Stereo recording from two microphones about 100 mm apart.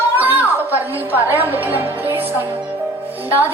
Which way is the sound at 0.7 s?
20° right (ahead or behind).